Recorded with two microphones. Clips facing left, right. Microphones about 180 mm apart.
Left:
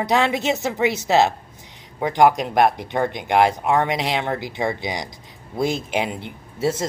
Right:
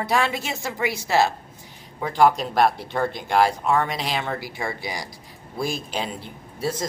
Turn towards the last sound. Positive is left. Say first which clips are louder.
# left 5 dB
turn(degrees=25)  # may be behind; listen again after turning